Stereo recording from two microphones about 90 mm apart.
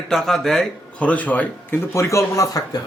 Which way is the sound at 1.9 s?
35° left (ahead or behind).